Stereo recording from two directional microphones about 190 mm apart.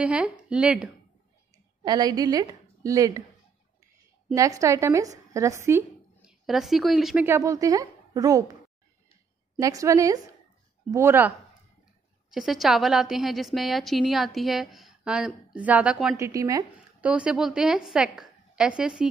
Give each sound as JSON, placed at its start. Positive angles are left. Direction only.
{"t": 0.0, "sound": "a woman's voice", "side_deg": -5}
{"t": 1.9, "sound": "a woman's voice", "side_deg": -20}
{"t": 4.3, "sound": "a woman's voice", "side_deg": -20}
{"t": 6.4, "sound": "a woman's voice", "side_deg": 0}
{"t": 7.2, "sound": "a woman's voice", "side_deg": -15}
{"t": 9.6, "sound": "a woman's voice", "side_deg": -15}
{"t": 16.2, "sound": "speech", "side_deg": -15}
{"t": 17.1, "sound": "a woman's voice", "side_deg": -5}